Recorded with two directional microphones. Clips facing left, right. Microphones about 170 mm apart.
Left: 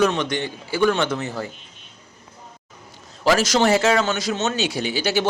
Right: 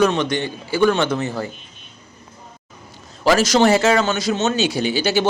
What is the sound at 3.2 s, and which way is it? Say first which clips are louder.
A man's voice: right 3 dB; 35° right (ahead or behind).